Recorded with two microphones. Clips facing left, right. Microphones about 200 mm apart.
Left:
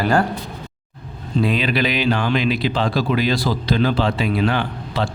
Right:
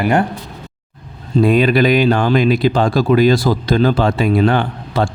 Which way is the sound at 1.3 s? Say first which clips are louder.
Right 7 dB; 50° right (ahead or behind).